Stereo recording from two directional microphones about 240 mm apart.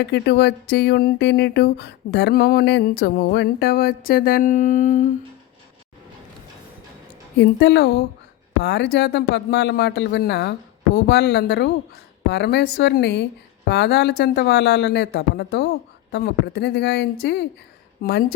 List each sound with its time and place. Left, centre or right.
0.0 s speech: left
7.3 s speech: left